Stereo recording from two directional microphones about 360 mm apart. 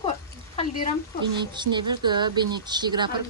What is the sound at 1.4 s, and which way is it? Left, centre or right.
Speech, centre.